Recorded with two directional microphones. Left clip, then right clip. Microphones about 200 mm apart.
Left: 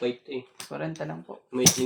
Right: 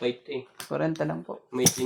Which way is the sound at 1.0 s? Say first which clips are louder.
Right 5 dB; 55° right (ahead or behind).